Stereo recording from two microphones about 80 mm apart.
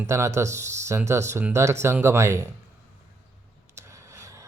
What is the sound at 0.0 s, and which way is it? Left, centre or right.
Speech, right.